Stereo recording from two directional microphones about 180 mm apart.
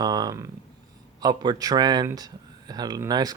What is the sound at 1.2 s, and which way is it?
Speech, 25° right (ahead or behind).